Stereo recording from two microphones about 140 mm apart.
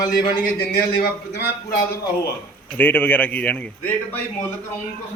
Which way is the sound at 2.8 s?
15° left (ahead or behind).